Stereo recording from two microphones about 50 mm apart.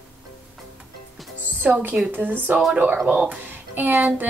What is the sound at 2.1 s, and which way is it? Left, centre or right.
Speech, right.